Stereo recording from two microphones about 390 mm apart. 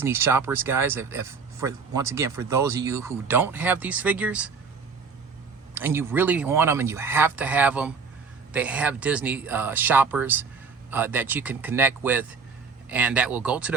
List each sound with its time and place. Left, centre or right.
0.0 s speech: centre
5.7 s speech: centre